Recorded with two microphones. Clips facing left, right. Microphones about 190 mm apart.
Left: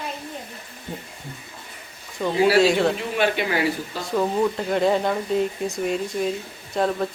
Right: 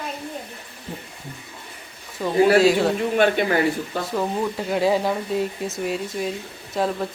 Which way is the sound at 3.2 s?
50° right (ahead or behind).